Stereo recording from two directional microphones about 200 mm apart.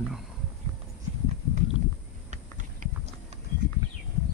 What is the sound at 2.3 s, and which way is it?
Clip-clop, 40° right (ahead or behind).